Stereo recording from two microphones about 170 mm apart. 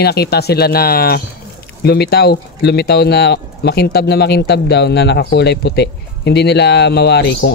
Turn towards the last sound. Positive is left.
turn(degrees=85)